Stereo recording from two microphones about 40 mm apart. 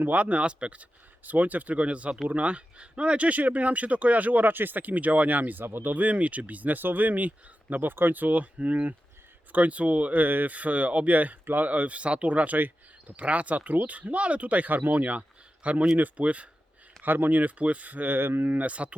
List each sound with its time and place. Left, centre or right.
0.1 s speech: right
5.9 s speech: right
17.0 s speech: right
18.2 s speech: right
18.4 s speech: right